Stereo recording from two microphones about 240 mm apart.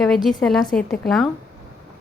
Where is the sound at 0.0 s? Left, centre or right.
Centre.